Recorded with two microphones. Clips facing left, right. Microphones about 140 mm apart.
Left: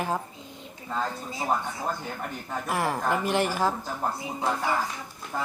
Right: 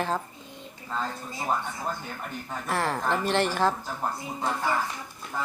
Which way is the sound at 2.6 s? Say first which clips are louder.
Even; 10° left (ahead or behind).